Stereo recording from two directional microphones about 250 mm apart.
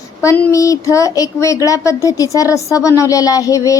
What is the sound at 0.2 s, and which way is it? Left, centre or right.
A woman's voice, centre.